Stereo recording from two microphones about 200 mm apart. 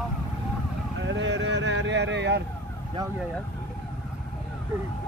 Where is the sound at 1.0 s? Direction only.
65° right (ahead or behind).